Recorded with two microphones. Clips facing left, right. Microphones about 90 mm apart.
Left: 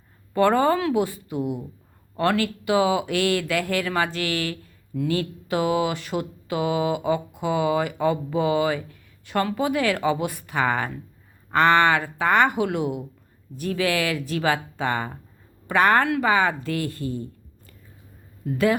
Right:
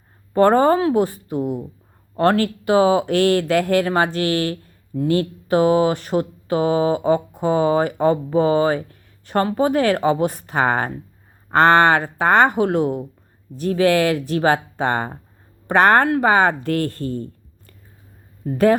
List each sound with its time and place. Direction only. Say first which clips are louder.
0.3 s speech: right 5 dB; 40° right (ahead or behind); by 17.2 s 60° right (ahead or behind)
18.4 s speech: right 6 dB; 40° right (ahead or behind)